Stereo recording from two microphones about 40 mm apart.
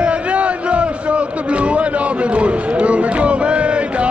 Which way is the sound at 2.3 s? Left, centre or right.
Right.